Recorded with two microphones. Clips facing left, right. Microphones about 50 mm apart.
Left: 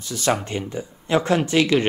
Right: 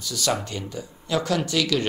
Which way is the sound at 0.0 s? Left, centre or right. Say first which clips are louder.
Left 3 dB; left.